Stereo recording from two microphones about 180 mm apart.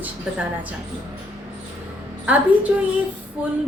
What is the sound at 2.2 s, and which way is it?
A woman's voice, 10° right (ahead or behind).